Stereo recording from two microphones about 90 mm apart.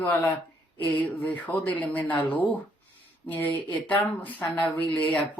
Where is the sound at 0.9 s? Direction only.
20° left (ahead or behind).